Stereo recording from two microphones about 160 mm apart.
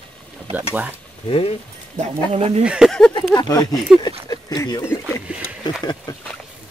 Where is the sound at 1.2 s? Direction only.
35° left (ahead or behind).